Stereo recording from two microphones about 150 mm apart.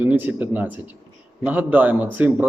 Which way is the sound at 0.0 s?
10° right (ahead or behind).